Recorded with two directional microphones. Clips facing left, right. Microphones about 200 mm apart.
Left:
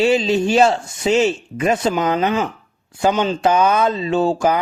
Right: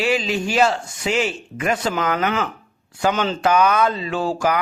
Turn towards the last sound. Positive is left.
turn(degrees=25)  # may be behind; listen again after turning